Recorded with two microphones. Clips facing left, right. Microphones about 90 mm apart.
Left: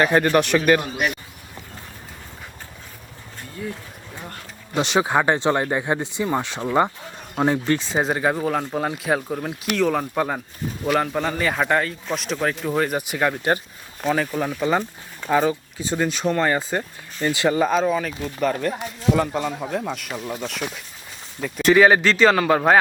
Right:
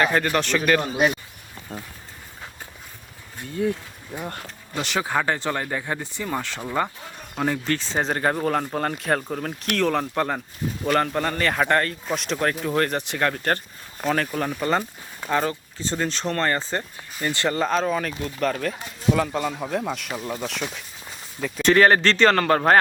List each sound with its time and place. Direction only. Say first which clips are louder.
0.0 s speech: left 4 dB; 20° left (ahead or behind)
4.1 s speech: right 6 dB; 15° right (ahead or behind)
4.7 s speech: left 5 dB; 20° left (ahead or behind)